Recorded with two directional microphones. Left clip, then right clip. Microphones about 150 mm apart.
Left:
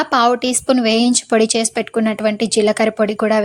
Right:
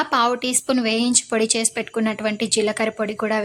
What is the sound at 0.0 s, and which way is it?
A woman's voice, 30° left (ahead or behind).